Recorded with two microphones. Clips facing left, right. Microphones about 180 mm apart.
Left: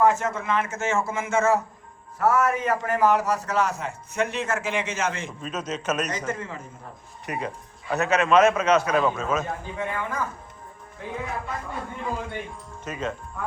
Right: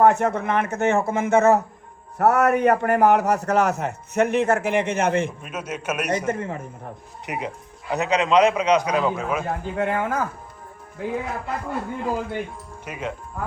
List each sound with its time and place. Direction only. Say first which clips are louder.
0.0 s a man's voice: right 4 dB; 60° right (ahead or behind)
5.4 s a man's voice: left 1 dB; 10° right (ahead or behind)
6.1 s a man's voice: right 6 dB; 55° right (ahead or behind)
7.3 s a man's voice: right 1 dB; 15° right (ahead or behind)
9.7 s a man's voice: right 7 dB; 65° right (ahead or behind)
11.4 s speech: right 5 dB; 70° right (ahead or behind)
12.8 s speech: even; 15° right (ahead or behind)